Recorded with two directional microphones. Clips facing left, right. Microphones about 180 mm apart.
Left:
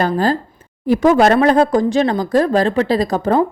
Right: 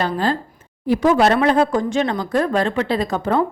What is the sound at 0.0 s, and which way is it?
A woman's voice, 40° left (ahead or behind).